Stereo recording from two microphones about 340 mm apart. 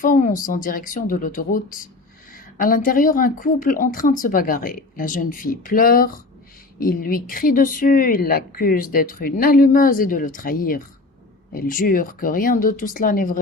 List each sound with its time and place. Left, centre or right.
0.0 s speech: left